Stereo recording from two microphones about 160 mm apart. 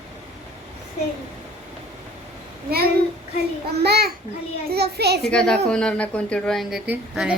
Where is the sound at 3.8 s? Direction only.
90° right.